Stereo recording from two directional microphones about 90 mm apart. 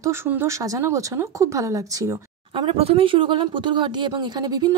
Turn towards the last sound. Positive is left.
turn(degrees=-50)  # may be behind; listen again after turning